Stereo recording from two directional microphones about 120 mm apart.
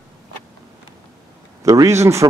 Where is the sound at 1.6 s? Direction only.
25° right (ahead or behind).